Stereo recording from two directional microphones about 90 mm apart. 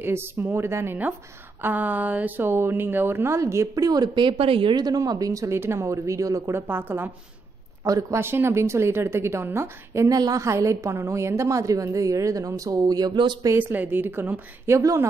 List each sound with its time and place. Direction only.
0.0 s speech: 25° right (ahead or behind); by 4.7 s 85° right
4.7 s a woman's voice: 45° right (ahead or behind); by 7.1 s 25° right (ahead or behind)
7.8 s a woman's voice: 40° right (ahead or behind)
8.2 s speech: 25° right (ahead or behind)
10.0 s a woman's voice: 45° right (ahead or behind)
13.6 s speech: 20° right (ahead or behind)
14.8 s a woman's voice: 35° right (ahead or behind)